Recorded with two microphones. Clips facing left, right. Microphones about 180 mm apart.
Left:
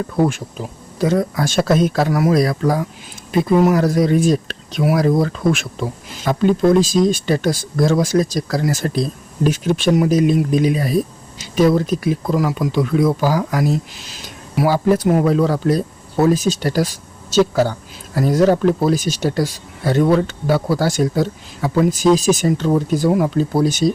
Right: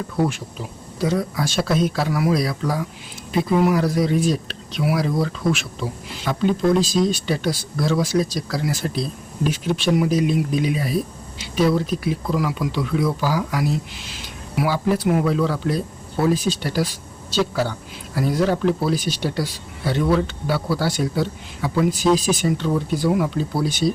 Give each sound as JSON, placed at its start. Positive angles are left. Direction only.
{"t": 0.2, "sound": "speech", "side_deg": 50}